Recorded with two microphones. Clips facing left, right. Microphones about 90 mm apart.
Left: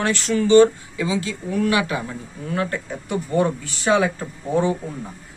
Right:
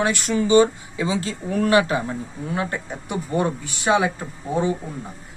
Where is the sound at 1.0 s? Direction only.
30° right (ahead or behind); by 4.1 s 15° right (ahead or behind).